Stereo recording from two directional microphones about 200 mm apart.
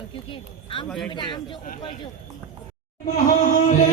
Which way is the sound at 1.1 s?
20° left (ahead or behind).